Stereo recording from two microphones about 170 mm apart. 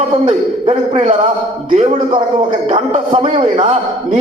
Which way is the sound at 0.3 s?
35° right (ahead or behind).